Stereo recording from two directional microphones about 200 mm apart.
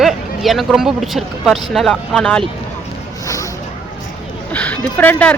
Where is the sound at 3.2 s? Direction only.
15° left (ahead or behind).